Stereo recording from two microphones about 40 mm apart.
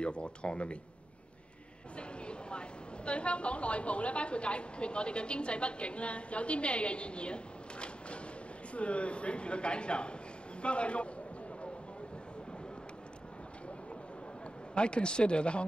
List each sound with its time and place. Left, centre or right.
0.0 s a woman's voice: left
2.0 s vehicle: left
3.1 s a woman's voice: left
14.7 s a woman's voice: left